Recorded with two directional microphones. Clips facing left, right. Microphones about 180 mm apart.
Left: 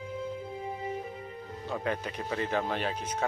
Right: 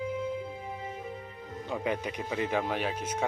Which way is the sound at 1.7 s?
15° right (ahead or behind).